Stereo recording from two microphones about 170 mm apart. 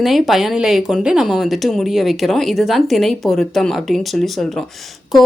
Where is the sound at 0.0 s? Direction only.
Centre (ahead or behind).